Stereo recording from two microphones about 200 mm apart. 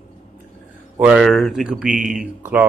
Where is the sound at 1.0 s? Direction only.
5° right (ahead or behind).